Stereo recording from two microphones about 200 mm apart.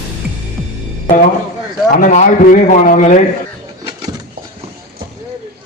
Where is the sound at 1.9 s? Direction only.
40° left (ahead or behind).